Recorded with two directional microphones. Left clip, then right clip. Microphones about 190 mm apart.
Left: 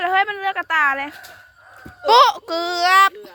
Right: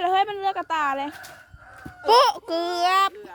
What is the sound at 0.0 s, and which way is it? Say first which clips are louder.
A child's voice: left 3 dB; 25° right (ahead or behind).